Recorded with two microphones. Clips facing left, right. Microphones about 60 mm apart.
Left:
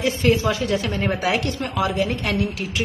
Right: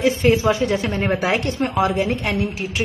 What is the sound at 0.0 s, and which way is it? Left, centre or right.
A woman's voice, right.